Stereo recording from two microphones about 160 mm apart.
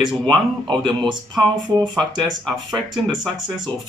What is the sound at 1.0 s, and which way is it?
Speech, centre (ahead or behind).